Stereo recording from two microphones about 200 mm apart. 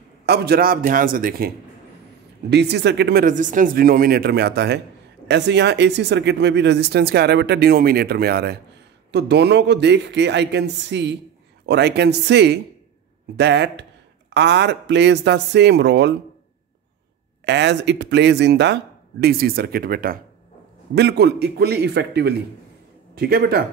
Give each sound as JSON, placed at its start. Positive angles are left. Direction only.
{"t": 0.3, "sound": "speech", "side_deg": -50}
{"t": 2.5, "sound": "speech", "side_deg": -55}
{"t": 17.5, "sound": "speech", "side_deg": -60}